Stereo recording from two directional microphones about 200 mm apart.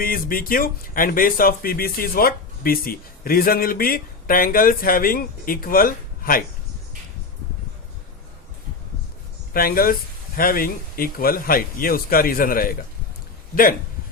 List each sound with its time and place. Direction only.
0.0 s speech: 45° left (ahead or behind)
9.5 s speech: 45° left (ahead or behind)